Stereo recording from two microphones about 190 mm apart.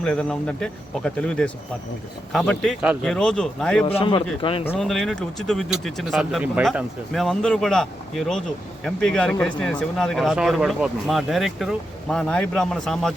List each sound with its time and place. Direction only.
0.0 s speech: 5° left (ahead or behind)
3.8 s a man's voice: 30° left (ahead or behind)
4.8 s speech: centre (ahead or behind)